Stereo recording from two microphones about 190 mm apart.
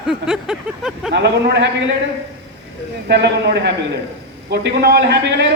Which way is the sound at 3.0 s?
60° right (ahead or behind).